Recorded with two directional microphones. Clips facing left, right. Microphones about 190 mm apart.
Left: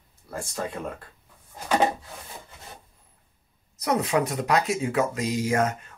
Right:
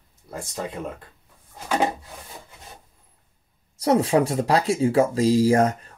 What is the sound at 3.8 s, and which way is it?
Speech, 30° right (ahead or behind).